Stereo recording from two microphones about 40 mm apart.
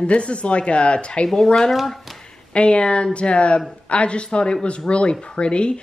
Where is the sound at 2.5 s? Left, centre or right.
Left.